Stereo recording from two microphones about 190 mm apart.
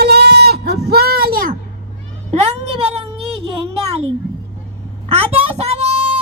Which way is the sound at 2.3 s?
35° right (ahead or behind).